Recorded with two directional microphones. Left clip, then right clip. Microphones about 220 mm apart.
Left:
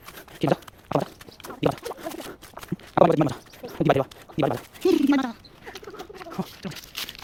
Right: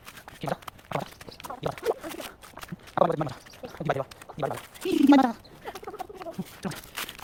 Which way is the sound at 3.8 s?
40° left (ahead or behind).